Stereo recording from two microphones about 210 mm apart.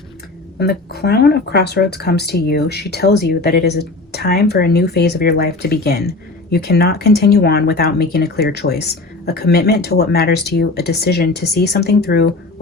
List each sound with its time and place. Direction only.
0.6 s speech: 50° left (ahead or behind)